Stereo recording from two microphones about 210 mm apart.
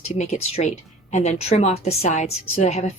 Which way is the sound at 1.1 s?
35° left (ahead or behind).